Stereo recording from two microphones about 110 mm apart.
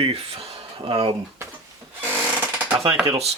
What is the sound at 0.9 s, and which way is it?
Speech, 60° right (ahead or behind).